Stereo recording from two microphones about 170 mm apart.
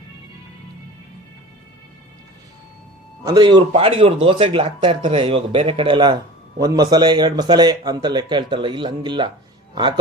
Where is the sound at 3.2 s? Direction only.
25° right (ahead or behind).